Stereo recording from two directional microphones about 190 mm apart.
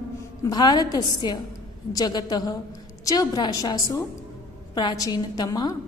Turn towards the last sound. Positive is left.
turn(degrees=20)  # may be behind; listen again after turning